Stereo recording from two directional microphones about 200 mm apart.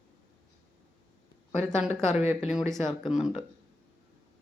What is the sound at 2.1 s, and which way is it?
Speech, 35° left (ahead or behind).